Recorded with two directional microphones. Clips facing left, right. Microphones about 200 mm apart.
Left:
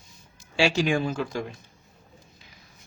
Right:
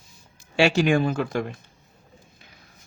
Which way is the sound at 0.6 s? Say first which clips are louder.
Right 4 dB; 60° right (ahead or behind).